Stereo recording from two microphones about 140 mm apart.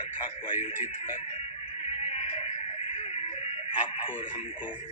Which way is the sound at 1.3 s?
50° left (ahead or behind).